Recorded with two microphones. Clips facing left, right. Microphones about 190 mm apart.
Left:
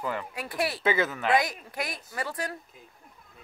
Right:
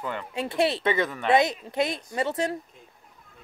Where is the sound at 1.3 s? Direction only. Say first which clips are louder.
Right 7 dB; 25° right (ahead or behind).